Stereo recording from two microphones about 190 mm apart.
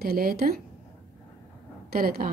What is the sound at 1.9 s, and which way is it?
Speech, 50° right (ahead or behind).